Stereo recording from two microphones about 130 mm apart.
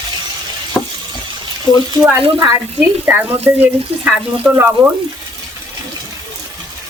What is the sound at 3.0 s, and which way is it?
Speech, 15° right (ahead or behind).